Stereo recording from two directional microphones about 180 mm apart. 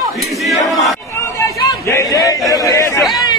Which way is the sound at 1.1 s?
15° left (ahead or behind).